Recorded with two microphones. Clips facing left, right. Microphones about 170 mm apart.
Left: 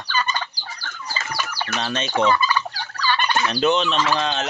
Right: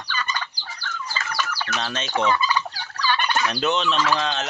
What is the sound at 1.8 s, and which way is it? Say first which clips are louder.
Gobble: left 4 dB; centre (ahead or behind).